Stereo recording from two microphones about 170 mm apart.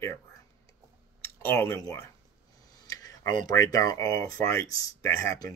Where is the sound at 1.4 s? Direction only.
15° left (ahead or behind).